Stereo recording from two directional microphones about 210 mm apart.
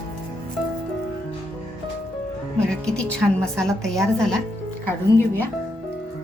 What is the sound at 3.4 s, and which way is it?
Speech, 5° left (ahead or behind).